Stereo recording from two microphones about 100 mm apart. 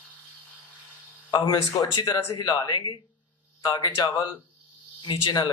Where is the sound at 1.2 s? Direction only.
45° left (ahead or behind).